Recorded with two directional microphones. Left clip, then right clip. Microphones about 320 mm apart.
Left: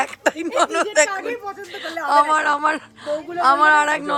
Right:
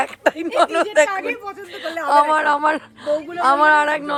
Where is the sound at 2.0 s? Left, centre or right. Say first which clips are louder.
Right 1 dB; centre.